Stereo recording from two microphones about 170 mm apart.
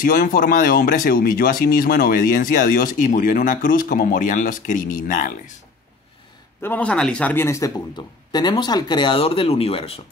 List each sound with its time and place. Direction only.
0.0 s speech: 55° left (ahead or behind)
6.6 s a man's voice: 10° left (ahead or behind); by 9.9 s 35° left (ahead or behind)